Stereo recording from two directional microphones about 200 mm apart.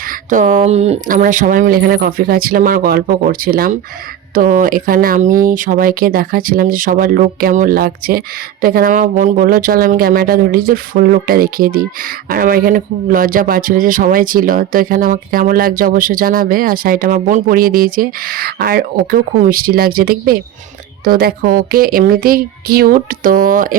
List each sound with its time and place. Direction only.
0.0 s speech: 40° right (ahead or behind)